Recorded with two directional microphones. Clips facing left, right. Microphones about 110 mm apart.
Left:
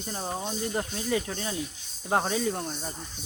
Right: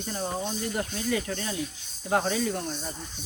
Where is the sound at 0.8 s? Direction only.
25° left (ahead or behind).